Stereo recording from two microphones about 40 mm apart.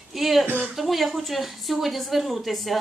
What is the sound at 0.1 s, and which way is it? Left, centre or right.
Speech, centre.